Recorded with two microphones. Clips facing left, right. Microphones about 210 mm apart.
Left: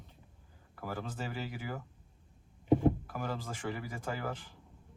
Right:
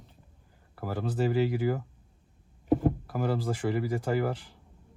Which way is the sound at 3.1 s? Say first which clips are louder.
Right 9 dB; 35° right (ahead or behind).